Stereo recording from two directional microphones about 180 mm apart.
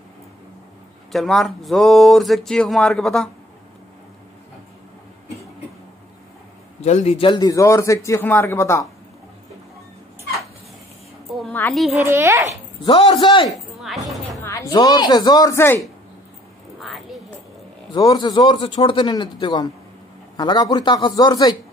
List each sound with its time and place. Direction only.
1.1 s speech: centre (ahead or behind)
6.8 s a man's voice: 40° left (ahead or behind); by 8.8 s 15° left (ahead or behind)
11.7 s speech: centre (ahead or behind)
12.1 s a child's voice: 15° right (ahead or behind)
12.8 s a man's voice: 30° left (ahead or behind)
13.5 s music: centre (ahead or behind)
14.4 s a woman's voice: 15° left (ahead or behind)
17.9 s a man's voice: 20° left (ahead or behind)